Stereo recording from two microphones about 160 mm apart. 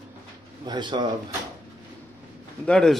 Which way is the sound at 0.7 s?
30° right (ahead or behind).